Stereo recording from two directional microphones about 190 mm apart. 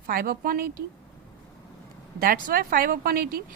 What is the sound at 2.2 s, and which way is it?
Speech, 50° right (ahead or behind).